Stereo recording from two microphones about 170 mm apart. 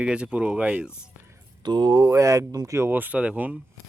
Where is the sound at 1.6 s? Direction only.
25° right (ahead or behind); by 3.6 s 10° right (ahead or behind).